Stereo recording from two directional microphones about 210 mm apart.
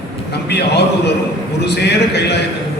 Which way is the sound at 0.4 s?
55° left (ahead or behind).